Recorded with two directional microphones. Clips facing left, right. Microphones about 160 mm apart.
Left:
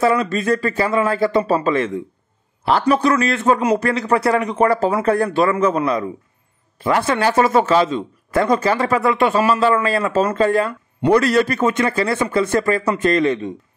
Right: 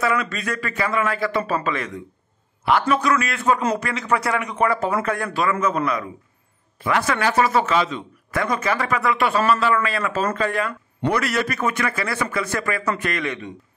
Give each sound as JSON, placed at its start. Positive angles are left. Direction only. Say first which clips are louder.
{"t": 0.0, "sound": "a man's voice", "louder": "left 6 dB", "side_deg": 30}
{"t": 6.8, "sound": "a man's voice", "louder": "left 4 dB", "side_deg": 30}